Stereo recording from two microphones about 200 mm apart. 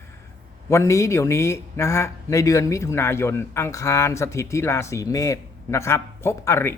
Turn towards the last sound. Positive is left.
turn(degrees=15)  # may be behind; listen again after turning